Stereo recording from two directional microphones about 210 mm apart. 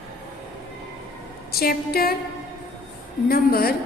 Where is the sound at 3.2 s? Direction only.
45° left (ahead or behind).